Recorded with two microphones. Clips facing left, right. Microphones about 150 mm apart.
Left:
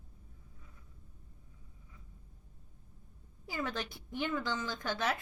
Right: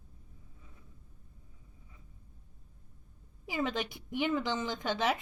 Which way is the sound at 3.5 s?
20° right (ahead or behind).